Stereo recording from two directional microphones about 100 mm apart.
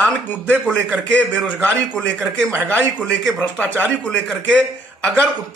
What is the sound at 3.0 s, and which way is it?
A man's voice, 15° left (ahead or behind).